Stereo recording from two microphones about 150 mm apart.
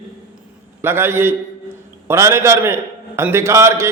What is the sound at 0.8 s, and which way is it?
A man's voice, 15° right (ahead or behind).